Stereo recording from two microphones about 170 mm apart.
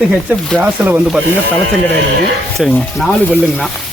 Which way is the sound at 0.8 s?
10° right (ahead or behind).